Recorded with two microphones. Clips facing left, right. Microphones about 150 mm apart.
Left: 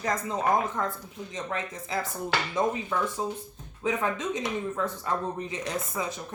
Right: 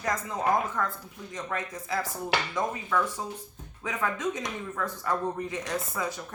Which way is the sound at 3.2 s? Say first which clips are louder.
Left 5 dB; 25° left (ahead or behind).